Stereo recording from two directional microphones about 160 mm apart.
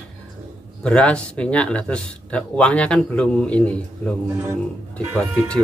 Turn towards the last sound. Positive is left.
turn(degrees=5)  # may be behind; listen again after turning